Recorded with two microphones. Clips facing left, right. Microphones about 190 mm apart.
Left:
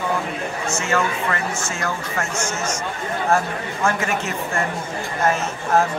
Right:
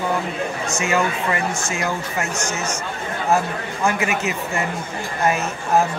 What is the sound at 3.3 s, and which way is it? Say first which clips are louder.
Speech: right 2 dB; 10° right (ahead or behind).